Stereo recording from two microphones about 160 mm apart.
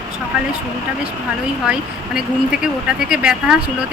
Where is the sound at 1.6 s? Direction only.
5° right (ahead or behind).